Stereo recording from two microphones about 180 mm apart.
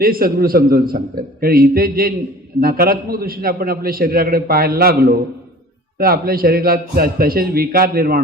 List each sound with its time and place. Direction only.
0.0 s a man's voice: 55° right (ahead or behind)